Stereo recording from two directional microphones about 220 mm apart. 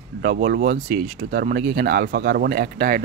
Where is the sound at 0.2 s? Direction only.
45° right (ahead or behind).